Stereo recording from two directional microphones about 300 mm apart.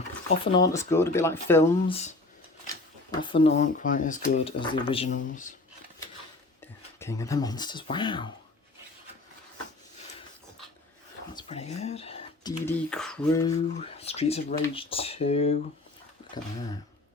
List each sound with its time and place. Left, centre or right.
0.5 s speech: centre
1.9 s speech: left
7.0 s speech: centre
11.3 s speech: centre
12.9 s a sound: centre
13.5 s speech: left